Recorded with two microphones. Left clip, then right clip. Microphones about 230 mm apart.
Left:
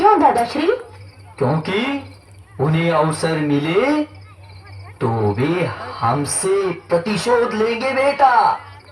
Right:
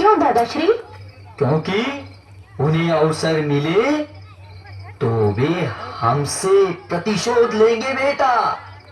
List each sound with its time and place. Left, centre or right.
0.0 s a sound: left
1.4 s speech: left
4.9 s speech: left